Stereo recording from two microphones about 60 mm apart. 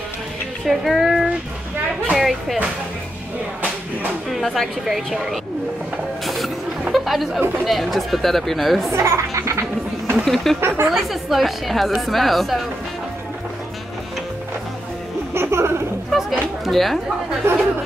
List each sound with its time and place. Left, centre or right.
0.7 s speech: centre
4.3 s a woman's voice: centre
6.2 s music: centre
6.9 s a woman's voice: centre
8.9 s a child's voice: right
10.1 s a woman's voice: centre
15.3 s a sound: right
16.1 s a woman's voice: centre
17.4 s speech: right